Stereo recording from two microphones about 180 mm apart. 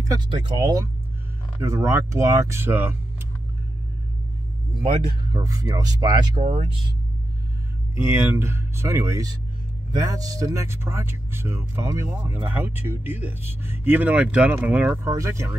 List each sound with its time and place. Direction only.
0.0 s speech: 20° right (ahead or behind)
5.3 s speech: 20° right (ahead or behind)
6.4 s speech: 35° right (ahead or behind)
8.0 s speech: 10° right (ahead or behind)